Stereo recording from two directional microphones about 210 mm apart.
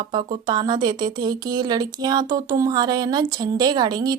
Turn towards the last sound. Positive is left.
turn(degrees=-20)  # may be behind; listen again after turning